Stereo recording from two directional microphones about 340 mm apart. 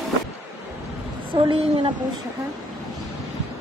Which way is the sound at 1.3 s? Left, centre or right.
Centre.